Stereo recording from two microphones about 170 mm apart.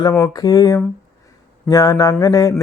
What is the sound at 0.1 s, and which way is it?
Speech, 20° left (ahead or behind).